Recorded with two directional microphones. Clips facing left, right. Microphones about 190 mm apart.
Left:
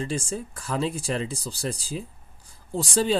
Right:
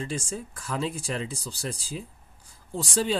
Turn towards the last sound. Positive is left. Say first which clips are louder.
# left 3 dB
turn(degrees=35)  # may be behind; listen again after turning